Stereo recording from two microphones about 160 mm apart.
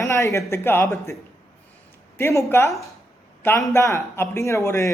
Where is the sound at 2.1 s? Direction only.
15° left (ahead or behind).